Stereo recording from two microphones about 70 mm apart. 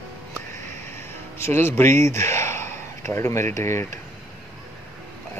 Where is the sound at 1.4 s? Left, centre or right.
Left.